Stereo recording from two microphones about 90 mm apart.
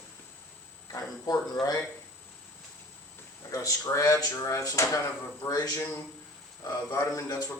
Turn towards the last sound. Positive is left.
turn(degrees=40)  # may be behind; listen again after turning